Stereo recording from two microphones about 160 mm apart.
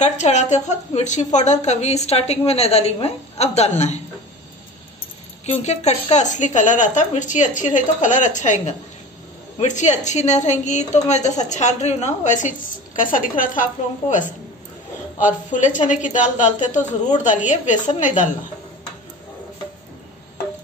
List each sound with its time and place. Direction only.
0.0 s a woman's voice: 45° left (ahead or behind)
5.4 s a woman's voice: 45° left (ahead or behind)